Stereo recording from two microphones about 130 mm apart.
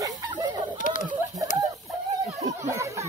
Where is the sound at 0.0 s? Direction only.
30° right (ahead or behind).